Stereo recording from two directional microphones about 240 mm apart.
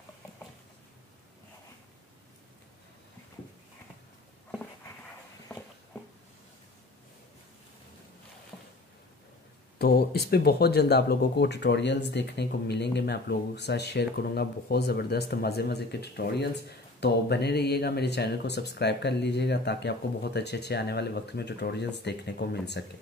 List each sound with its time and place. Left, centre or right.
9.8 s speech: left